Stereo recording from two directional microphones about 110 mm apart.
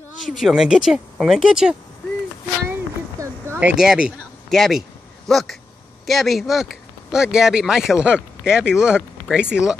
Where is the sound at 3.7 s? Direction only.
5° right (ahead or behind).